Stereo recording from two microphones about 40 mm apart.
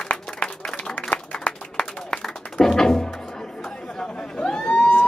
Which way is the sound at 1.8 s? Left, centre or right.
Centre.